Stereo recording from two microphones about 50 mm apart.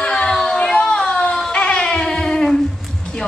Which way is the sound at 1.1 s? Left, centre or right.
Centre.